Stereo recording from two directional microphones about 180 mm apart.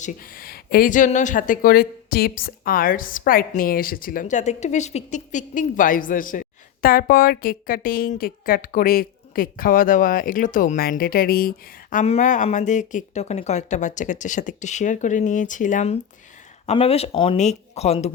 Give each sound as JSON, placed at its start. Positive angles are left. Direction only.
{"t": 0.0, "sound": "speech", "side_deg": 50}
{"t": 12.0, "sound": "speech", "side_deg": 40}